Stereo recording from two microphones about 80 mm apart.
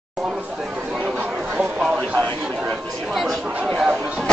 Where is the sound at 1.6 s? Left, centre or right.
Centre.